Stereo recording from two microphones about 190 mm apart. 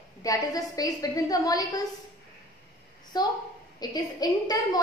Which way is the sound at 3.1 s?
20° left (ahead or behind).